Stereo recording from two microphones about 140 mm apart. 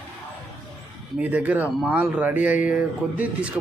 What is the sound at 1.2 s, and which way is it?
Speech, 10° right (ahead or behind).